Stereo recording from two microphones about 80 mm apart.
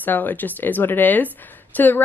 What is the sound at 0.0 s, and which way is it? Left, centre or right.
Speech, left.